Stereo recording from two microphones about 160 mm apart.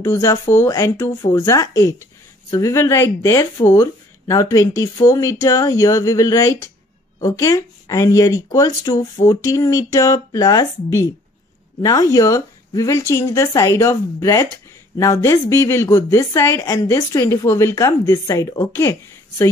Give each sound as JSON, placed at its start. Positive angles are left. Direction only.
{"t": 0.0, "sound": "a woman's voice", "side_deg": 20}